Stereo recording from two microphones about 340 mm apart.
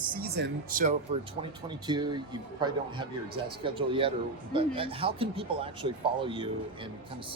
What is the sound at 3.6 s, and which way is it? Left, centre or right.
A man's voice, centre.